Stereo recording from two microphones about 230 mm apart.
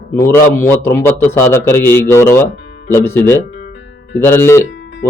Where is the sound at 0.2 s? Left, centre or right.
Centre.